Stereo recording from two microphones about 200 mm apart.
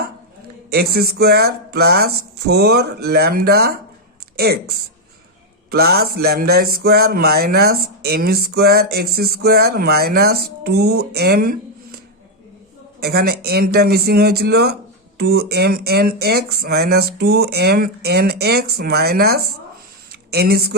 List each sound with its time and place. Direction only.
0.7 s speech: 50° right (ahead or behind)
5.7 s speech: 50° right (ahead or behind)
13.0 s speech: 50° right (ahead or behind)